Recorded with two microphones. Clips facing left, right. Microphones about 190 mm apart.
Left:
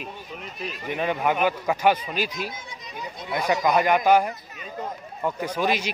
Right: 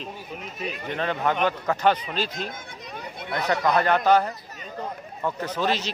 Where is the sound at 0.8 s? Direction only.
10° left (ahead or behind).